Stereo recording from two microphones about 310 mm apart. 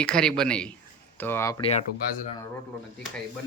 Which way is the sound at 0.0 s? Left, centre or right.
Centre.